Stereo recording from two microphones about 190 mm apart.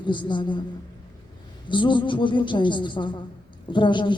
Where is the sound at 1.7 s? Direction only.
25° left (ahead or behind).